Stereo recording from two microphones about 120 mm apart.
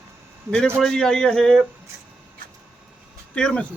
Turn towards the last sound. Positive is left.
turn(degrees=10)  # may be behind; listen again after turning